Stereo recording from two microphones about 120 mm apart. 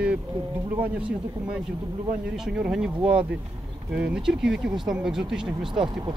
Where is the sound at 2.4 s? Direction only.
5° right (ahead or behind).